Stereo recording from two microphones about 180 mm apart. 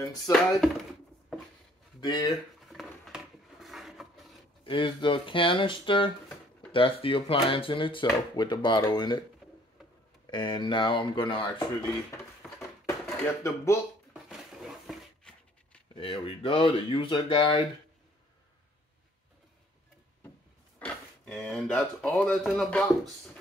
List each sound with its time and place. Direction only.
0.3 s speech: 20° left (ahead or behind)
2.0 s speech: 25° left (ahead or behind)
2.7 s a sound: centre (ahead or behind)
4.6 s speech: 25° left (ahead or behind)
10.3 s speech: 25° left (ahead or behind)
12.4 s a sound: 5° left (ahead or behind)
12.8 s dishes: 15° left (ahead or behind)
14.3 s a sound: centre (ahead or behind)
15.9 s speech: 30° left (ahead or behind)
20.8 s speech: 5° left (ahead or behind)